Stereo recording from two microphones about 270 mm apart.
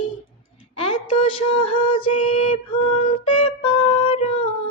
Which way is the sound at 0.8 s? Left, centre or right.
Centre.